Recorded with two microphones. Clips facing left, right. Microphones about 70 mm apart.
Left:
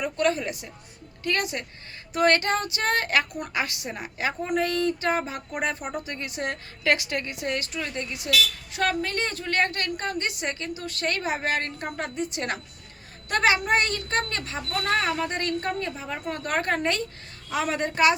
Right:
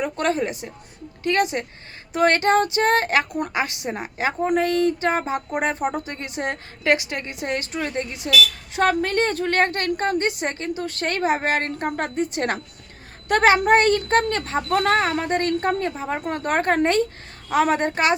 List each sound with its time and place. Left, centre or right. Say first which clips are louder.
0.0 s a woman's voice: right 2 dB; right
9.0 s a woman's voice: right 7 dB; right